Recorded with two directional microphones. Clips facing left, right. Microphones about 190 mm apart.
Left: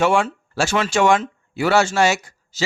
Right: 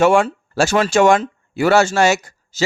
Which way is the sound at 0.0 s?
45° right (ahead or behind).